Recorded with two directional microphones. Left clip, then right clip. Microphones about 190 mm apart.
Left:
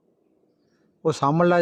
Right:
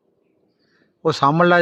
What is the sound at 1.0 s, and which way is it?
Speech, 10° right (ahead or behind).